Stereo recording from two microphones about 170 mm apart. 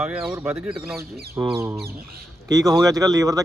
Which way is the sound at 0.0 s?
5° right (ahead or behind).